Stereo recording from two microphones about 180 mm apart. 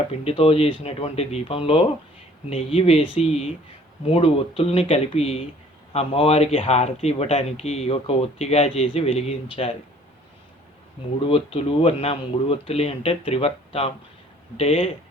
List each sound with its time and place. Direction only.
0.3 s speech: 35° left (ahead or behind)
11.2 s speech: 35° left (ahead or behind)